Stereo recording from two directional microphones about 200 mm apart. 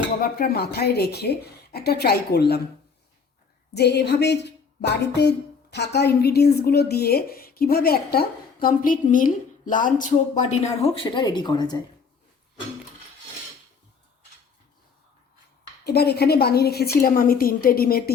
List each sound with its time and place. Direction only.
0.2 s a woman's voice: 50° left (ahead or behind)
3.8 s a woman's voice: 55° left (ahead or behind); by 10.2 s 40° left (ahead or behind)
10.9 s speech: 25° left (ahead or behind)
15.9 s a woman's voice: 55° left (ahead or behind)